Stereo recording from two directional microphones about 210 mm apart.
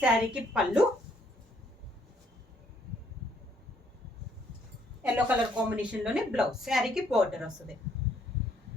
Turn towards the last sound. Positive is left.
turn(degrees=-5)  # may be behind; listen again after turning